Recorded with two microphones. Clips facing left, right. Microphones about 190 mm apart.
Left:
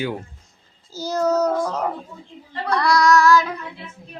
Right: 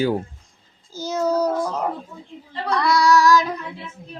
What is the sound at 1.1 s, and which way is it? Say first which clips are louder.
Child singing: left 1 dB; 10° right (ahead or behind).